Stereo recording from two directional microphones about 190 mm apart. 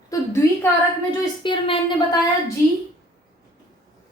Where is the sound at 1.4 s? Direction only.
25° left (ahead or behind).